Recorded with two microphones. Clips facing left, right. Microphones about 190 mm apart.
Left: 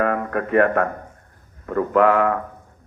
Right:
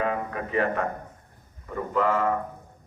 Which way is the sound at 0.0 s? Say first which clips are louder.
Left 6 dB; 60° left (ahead or behind).